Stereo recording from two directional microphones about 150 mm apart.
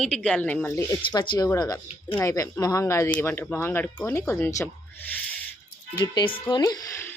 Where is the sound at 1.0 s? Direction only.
30° left (ahead or behind).